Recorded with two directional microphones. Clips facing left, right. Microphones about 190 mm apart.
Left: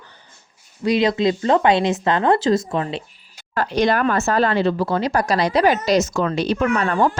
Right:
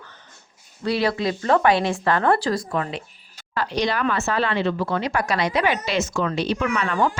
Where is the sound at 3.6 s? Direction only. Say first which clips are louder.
Left 5 dB; 50° left (ahead or behind).